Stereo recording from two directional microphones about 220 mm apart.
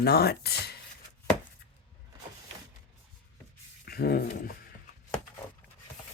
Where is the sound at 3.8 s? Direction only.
45° left (ahead or behind).